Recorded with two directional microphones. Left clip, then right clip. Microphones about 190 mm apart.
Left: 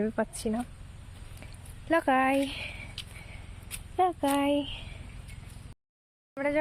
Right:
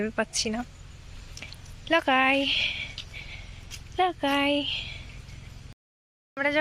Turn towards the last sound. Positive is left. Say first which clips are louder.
# right 3 dB
turn(degrees=0)  # may be behind; listen again after turning